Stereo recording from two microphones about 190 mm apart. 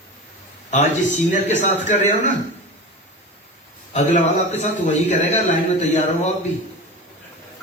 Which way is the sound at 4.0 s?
40° left (ahead or behind).